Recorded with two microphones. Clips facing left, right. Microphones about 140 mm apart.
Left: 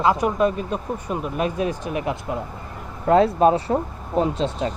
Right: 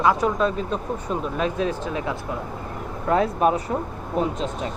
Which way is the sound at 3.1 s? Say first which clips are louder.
Left 4 dB; 30° left (ahead or behind).